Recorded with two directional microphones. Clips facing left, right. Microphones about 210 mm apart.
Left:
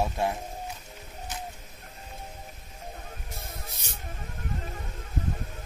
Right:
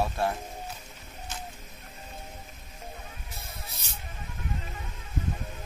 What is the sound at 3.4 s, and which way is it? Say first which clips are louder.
Spray: left 2 dB; 45° left (ahead or behind).